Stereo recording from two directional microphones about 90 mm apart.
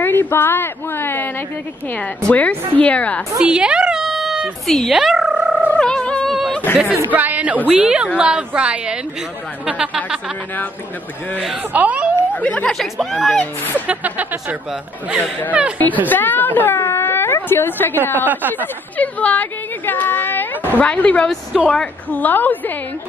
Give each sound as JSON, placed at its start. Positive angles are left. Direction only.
{"t": 0.0, "sound": "a woman's voice", "side_deg": 25}
{"t": 3.3, "sound": "a woman's voice", "side_deg": -10}
{"t": 4.9, "sound": "purr", "side_deg": -5}
{"t": 5.7, "sound": "turkey", "side_deg": 10}
{"t": 6.3, "sound": "a sound", "side_deg": 0}
{"t": 7.1, "sound": "a woman's voice", "side_deg": -20}
{"t": 11.7, "sound": "a woman's voice", "side_deg": -15}
{"t": 12.4, "sound": "a woman's voice", "side_deg": 15}
{"t": 12.7, "sound": "speech", "side_deg": 0}
{"t": 13.8, "sound": "a woman's voice", "side_deg": -15}
{"t": 16.1, "sound": "speech", "side_deg": 20}
{"t": 18.2, "sound": "speech", "side_deg": -20}
{"t": 18.9, "sound": "a woman's voice", "side_deg": 15}